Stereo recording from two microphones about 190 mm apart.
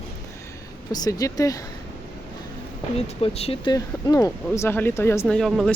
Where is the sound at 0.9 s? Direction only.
20° left (ahead or behind).